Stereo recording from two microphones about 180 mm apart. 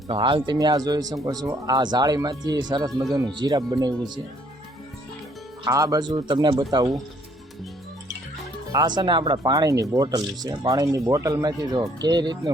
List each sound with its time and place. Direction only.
0.1 s speech: 25° right (ahead or behind)
5.6 s speech: 20° right (ahead or behind)
9.0 s speech: 25° right (ahead or behind)